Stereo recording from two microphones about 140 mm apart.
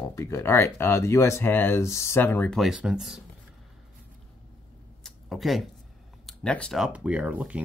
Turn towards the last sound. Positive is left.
turn(degrees=-10)  # may be behind; listen again after turning